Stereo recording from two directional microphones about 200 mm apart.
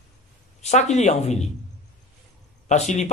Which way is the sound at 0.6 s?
35° left (ahead or behind).